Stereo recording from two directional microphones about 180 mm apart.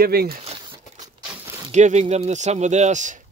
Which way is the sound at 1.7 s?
40° right (ahead or behind).